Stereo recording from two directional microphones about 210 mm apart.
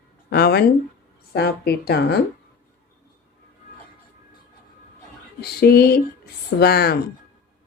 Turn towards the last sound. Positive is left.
turn(degrees=50)  # may be behind; listen again after turning